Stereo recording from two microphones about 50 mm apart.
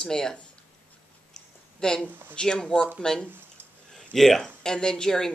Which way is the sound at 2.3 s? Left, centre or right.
Centre.